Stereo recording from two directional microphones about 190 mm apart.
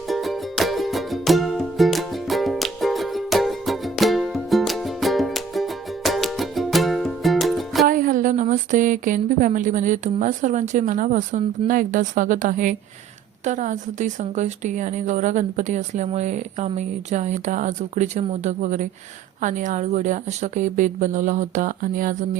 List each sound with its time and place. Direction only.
0.1 s music: centre (ahead or behind)
7.9 s a woman's voice: 45° right (ahead or behind)